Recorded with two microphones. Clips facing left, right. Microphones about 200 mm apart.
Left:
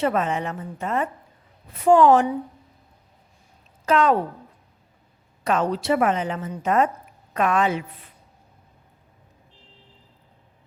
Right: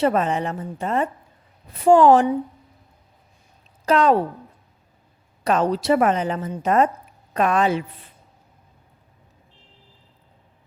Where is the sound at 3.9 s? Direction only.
35° right (ahead or behind).